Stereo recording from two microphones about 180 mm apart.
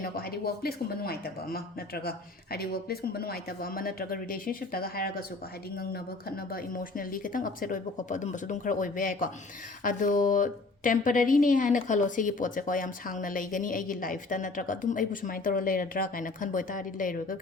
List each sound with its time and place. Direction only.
0.0 s a woman's voice: 55° left (ahead or behind)